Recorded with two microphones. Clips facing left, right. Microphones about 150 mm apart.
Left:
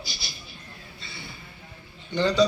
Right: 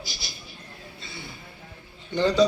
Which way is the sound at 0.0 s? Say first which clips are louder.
Even; 45° right (ahead or behind).